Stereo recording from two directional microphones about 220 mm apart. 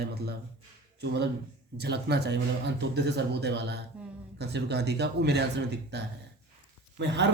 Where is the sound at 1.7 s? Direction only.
50° right (ahead or behind).